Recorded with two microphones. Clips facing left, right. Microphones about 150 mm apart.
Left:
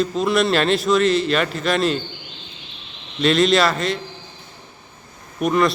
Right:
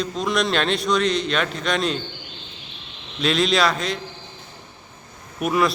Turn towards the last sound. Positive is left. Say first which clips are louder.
# left 3 dB
turn(degrees=-5)  # may be behind; listen again after turning